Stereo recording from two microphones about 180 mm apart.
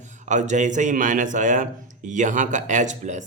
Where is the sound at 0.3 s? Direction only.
40° right (ahead or behind).